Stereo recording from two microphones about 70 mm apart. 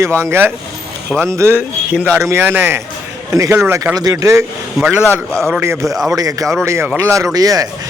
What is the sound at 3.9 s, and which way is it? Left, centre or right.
Speech, right.